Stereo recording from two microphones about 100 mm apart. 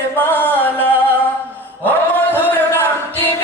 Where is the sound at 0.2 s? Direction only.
20° left (ahead or behind).